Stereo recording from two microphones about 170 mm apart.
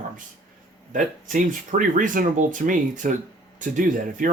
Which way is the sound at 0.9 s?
50° right (ahead or behind).